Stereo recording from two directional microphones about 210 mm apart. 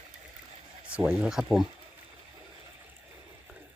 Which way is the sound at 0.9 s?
5° right (ahead or behind).